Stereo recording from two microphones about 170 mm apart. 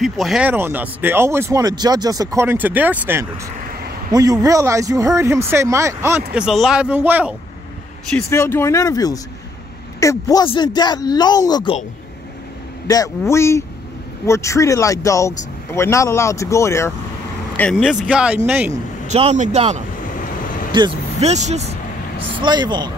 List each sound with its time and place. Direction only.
0.0 s speech: centre (ahead or behind)
4.1 s speech: 20° right (ahead or behind)
6.3 s speech: centre (ahead or behind)
8.3 s speech: 15° left (ahead or behind)
12.8 s speech: 20° left (ahead or behind)
17.6 s speech: 5° left (ahead or behind)
18.7 s a man's voice: 40° right (ahead or behind)
20.7 s speech: 30° right (ahead or behind)
21.2 s a man's voice: 40° right (ahead or behind)
22.4 s speech: 25° right (ahead or behind)